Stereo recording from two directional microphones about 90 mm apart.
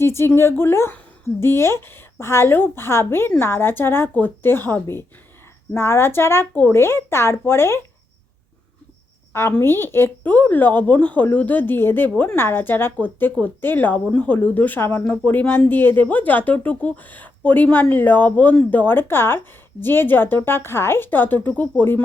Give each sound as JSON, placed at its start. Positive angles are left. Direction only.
{"t": 0.0, "sound": "speech", "side_deg": 30}
{"t": 9.3, "sound": "speech", "side_deg": 25}